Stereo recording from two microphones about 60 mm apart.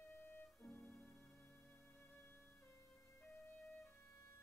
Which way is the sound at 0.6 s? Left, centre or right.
Left.